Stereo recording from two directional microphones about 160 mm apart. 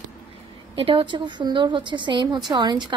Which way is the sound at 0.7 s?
35° right (ahead or behind).